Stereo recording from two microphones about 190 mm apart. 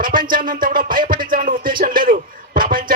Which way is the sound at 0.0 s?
45° right (ahead or behind).